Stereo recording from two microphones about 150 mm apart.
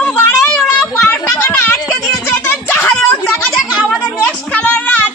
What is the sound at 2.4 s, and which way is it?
Music, 15° left (ahead or behind).